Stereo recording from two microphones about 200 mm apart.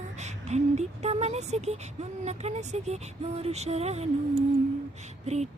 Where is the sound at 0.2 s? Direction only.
35° right (ahead or behind).